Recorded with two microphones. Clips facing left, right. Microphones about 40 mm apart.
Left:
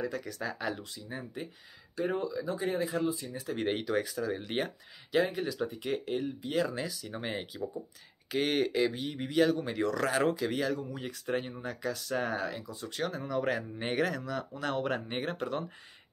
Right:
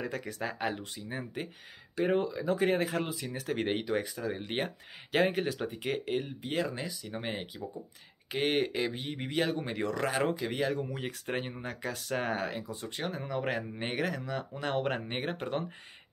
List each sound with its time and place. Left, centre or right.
0.0 s speech: right
2.4 s speech: right
3.6 s speech: centre
5.1 s speech: right
6.5 s speech: centre
10.9 s speech: right; by 13.9 s centre
13.9 s speech: centre
14.5 s speech: right